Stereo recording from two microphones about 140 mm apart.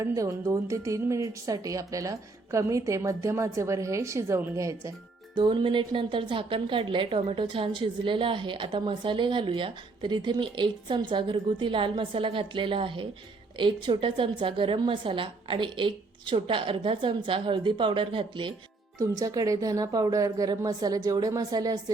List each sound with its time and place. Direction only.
0.0 s a woman's voice: 25° right (ahead or behind)
5.3 s a woman's voice: 35° right (ahead or behind)
18.9 s a woman's voice: 25° right (ahead or behind)